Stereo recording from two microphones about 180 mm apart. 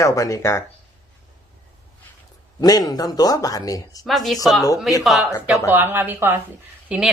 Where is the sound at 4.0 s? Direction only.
Centre (ahead or behind).